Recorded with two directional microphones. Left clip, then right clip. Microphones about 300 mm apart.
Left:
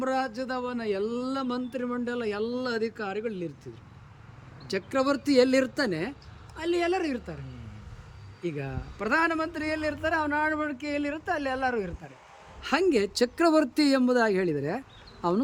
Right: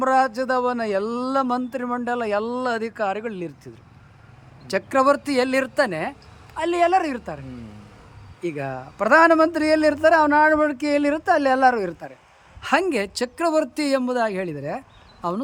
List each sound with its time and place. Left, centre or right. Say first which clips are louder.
0.0 s a man's voice: right 10 dB; centre
8.4 s a man's voice: right 7 dB; centre